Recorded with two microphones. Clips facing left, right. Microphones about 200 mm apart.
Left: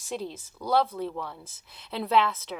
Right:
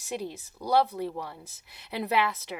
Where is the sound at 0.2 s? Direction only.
15° right (ahead or behind).